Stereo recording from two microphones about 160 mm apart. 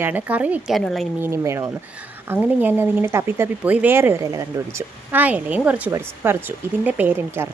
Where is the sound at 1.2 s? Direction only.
15° right (ahead or behind).